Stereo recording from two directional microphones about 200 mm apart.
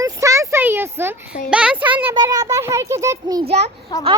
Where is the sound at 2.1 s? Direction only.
20° right (ahead or behind).